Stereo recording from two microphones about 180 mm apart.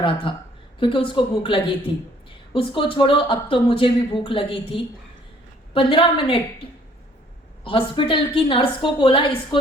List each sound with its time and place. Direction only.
0.3 s speech: 30° left (ahead or behind)
7.6 s speech: 30° left (ahead or behind)